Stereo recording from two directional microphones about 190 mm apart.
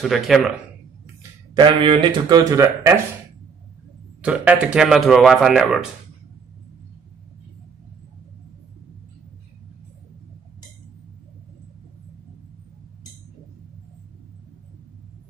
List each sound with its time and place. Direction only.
0.0 s speech: centre (ahead or behind)
1.5 s speech: 25° right (ahead or behind)
4.2 s speech: 5° right (ahead or behind)